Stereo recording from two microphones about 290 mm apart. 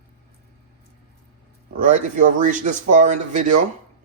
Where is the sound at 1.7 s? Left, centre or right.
Right.